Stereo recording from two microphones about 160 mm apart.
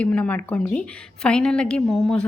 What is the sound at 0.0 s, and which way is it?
A woman's voice, 10° left (ahead or behind).